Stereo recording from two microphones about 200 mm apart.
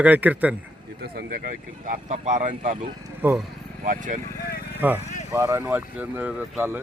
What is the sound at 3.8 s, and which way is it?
Speech, 40° right (ahead or behind).